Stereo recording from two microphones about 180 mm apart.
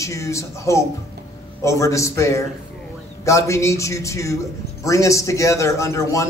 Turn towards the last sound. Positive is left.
turn(degrees=15)  # may be behind; listen again after turning